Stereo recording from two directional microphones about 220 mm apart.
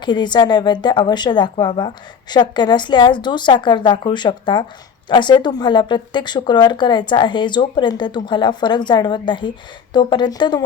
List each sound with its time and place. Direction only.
0.0 s speech: 20° left (ahead or behind)